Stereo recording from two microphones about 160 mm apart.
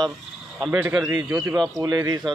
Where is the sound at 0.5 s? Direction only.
Centre (ahead or behind).